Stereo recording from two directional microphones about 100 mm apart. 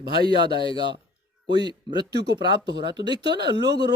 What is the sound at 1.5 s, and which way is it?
Speech, 45° right (ahead or behind).